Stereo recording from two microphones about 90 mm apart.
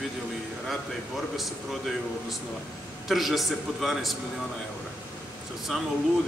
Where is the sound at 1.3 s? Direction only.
Centre (ahead or behind).